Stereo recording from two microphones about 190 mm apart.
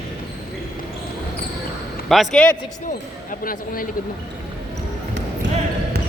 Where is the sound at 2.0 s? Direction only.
Centre (ahead or behind).